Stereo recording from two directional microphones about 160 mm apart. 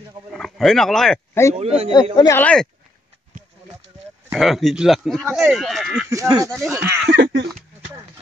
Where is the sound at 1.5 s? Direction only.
40° right (ahead or behind).